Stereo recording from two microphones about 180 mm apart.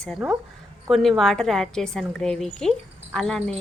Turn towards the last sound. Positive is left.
turn(degrees=5)  # may be behind; listen again after turning